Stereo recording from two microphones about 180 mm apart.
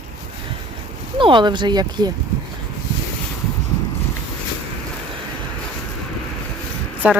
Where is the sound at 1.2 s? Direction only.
25° right (ahead or behind).